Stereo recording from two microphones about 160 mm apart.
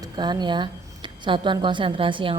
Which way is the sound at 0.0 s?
25° right (ahead or behind).